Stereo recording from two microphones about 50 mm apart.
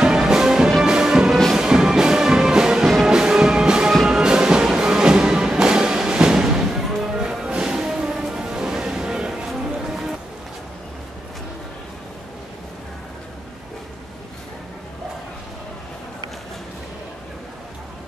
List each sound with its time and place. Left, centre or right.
0.0 s music: centre